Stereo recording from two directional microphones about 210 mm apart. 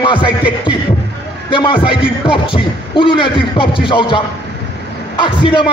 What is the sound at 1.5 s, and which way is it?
A man's voice, 25° left (ahead or behind).